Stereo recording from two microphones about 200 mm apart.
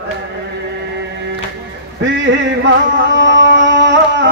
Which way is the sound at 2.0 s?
65° right (ahead or behind).